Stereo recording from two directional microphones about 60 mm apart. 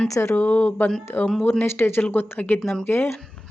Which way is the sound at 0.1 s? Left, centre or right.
Left.